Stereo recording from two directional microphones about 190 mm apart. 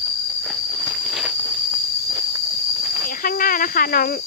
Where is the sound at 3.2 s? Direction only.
50° left (ahead or behind).